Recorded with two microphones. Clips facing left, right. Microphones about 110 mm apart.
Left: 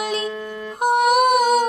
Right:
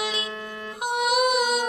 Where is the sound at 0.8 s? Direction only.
50° left (ahead or behind).